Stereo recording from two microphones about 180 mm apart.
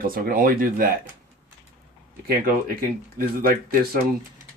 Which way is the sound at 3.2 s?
55° right (ahead or behind).